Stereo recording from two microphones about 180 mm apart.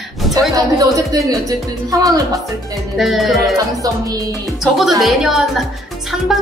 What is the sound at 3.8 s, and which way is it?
Speech, 20° right (ahead or behind).